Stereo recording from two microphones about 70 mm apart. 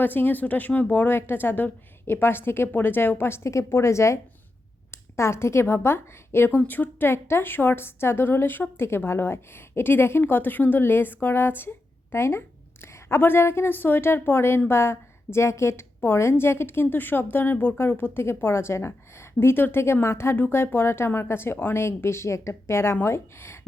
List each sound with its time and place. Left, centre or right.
0.0 s a woman's voice: left